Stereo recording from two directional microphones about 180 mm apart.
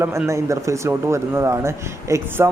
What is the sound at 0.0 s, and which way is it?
Speech, 15° right (ahead or behind).